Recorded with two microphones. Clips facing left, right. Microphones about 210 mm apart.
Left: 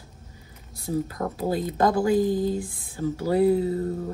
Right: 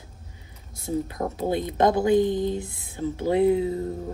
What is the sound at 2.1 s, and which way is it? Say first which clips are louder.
Speech: right 1 dB; 5° left (ahead or behind).